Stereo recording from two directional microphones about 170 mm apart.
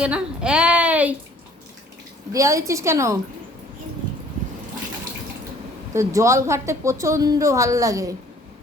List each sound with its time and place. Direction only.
0.0 s speech: 5° right (ahead or behind)
2.3 s a woman's voice: 20° right (ahead or behind)
5.9 s a woman's voice: 15° right (ahead or behind)